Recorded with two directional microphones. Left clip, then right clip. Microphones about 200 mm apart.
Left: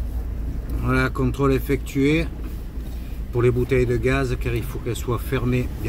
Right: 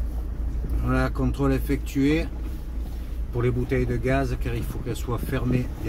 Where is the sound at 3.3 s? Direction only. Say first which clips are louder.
Left 6 dB; 30° left (ahead or behind).